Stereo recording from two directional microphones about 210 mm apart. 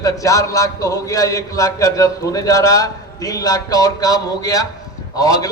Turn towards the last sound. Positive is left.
turn(degrees=15)  # may be behind; listen again after turning